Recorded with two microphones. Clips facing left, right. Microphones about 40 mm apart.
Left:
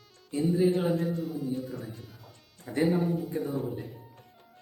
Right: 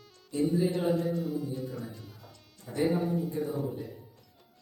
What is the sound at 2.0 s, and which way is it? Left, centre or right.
Music, centre.